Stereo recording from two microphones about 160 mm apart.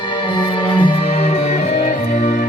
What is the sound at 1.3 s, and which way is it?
Music, 45° left (ahead or behind).